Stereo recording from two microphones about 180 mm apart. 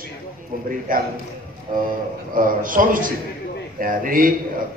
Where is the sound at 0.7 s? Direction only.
50° right (ahead or behind).